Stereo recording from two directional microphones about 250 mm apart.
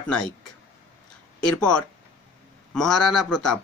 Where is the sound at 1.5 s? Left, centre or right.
Centre.